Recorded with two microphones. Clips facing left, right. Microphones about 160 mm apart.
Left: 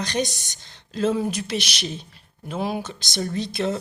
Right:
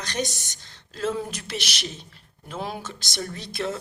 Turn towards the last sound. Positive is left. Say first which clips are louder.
# left 5 dB
turn(degrees=20)  # may be behind; listen again after turning